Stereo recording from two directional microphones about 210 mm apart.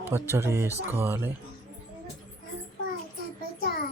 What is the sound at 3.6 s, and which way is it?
Music, 45° left (ahead or behind).